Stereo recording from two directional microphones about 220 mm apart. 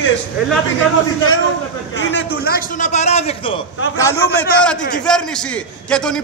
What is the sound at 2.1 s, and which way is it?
A man's voice, 45° left (ahead or behind).